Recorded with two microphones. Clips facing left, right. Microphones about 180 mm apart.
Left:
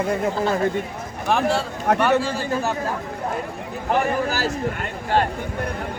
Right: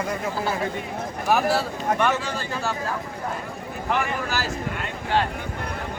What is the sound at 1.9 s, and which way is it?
Speech, 70° left (ahead or behind).